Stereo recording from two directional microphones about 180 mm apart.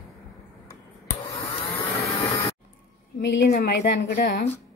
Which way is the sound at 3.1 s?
70° left (ahead or behind).